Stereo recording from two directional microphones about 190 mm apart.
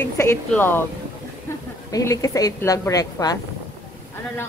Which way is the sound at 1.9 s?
15° left (ahead or behind).